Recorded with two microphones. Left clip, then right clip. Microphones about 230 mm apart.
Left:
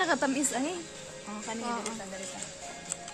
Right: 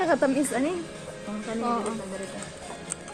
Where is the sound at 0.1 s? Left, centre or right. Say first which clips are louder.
Right 5 dB; left.